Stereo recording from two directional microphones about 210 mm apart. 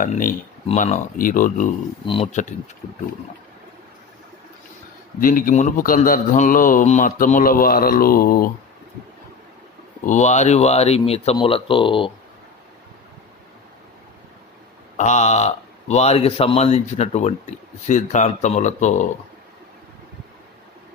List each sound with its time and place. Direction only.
0.0 s speech: 40° left (ahead or behind)
2.0 s speech: 25° left (ahead or behind)
5.2 s speech: 40° left (ahead or behind)
10.1 s speech: 35° left (ahead or behind)
14.9 s speech: 35° left (ahead or behind)